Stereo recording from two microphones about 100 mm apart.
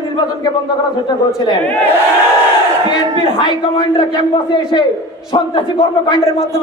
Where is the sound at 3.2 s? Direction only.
55° left (ahead or behind).